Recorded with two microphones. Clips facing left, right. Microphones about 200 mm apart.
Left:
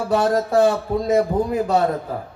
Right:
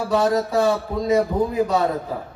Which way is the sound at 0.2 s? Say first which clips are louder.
Left 3 dB; 50° left (ahead or behind).